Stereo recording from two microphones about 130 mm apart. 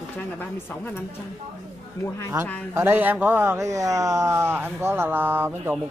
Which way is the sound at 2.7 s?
15° right (ahead or behind).